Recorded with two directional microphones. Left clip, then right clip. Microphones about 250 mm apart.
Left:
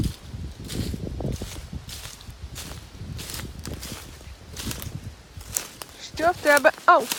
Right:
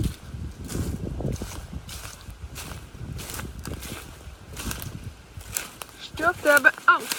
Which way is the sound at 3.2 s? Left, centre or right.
Centre.